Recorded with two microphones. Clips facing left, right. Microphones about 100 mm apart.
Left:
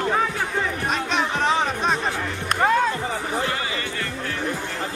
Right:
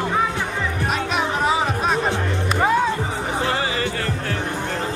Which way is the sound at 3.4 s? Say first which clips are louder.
Right 5 dB; 25° right (ahead or behind).